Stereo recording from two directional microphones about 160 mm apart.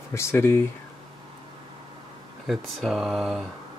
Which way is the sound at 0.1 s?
15° left (ahead or behind).